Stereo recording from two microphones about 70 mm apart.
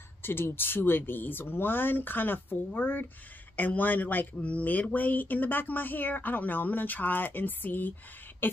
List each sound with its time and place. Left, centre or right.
0.2 s speech: left